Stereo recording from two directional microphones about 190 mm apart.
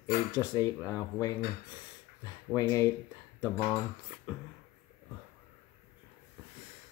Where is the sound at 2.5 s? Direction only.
15° left (ahead or behind).